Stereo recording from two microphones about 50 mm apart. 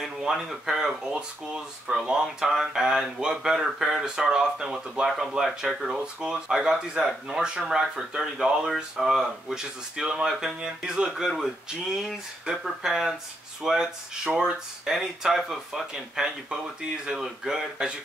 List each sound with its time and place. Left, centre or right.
0.0 s speech: centre
7.4 s speech: centre
12.6 s speech: centre